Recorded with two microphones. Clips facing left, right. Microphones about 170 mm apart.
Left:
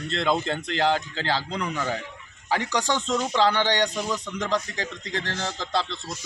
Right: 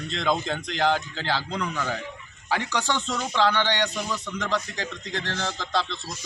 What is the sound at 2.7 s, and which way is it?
A man's voice, 15° left (ahead or behind).